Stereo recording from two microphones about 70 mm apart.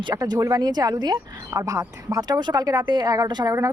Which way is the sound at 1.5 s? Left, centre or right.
Right.